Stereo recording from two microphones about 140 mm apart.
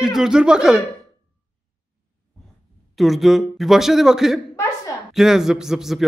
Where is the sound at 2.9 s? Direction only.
Centre (ahead or behind).